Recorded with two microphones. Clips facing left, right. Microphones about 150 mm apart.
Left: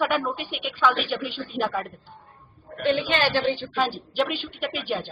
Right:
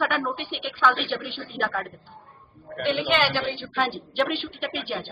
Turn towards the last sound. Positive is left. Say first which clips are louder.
# left 2 dB
turn(degrees=0)  # may be behind; listen again after turning